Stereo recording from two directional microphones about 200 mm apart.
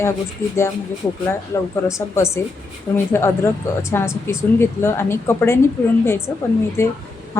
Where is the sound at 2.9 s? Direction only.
10° left (ahead or behind).